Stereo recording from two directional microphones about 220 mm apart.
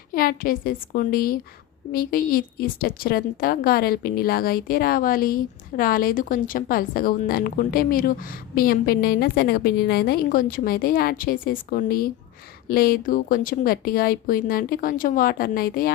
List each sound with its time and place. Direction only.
0.1 s a woman's voice: 40° left (ahead or behind)